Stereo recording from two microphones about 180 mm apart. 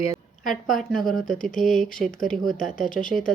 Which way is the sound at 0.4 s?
Centre (ahead or behind).